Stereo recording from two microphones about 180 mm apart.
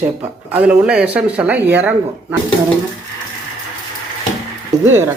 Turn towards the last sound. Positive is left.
turn(degrees=-15)  # may be behind; listen again after turning